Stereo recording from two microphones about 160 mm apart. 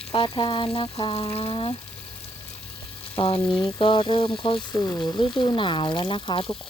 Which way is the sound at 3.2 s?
35° left (ahead or behind).